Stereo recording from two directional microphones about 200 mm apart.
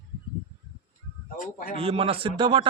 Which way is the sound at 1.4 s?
40° left (ahead or behind).